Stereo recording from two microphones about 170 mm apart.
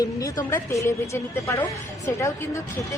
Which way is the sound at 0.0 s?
20° left (ahead or behind).